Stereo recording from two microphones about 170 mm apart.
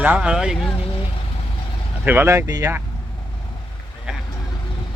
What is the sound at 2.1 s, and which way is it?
Speech, 15° right (ahead or behind).